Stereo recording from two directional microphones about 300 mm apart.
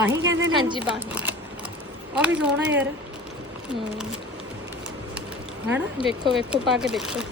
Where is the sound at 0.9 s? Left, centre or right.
Centre.